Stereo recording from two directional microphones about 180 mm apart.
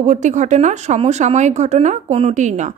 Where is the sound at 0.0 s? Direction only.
40° right (ahead or behind).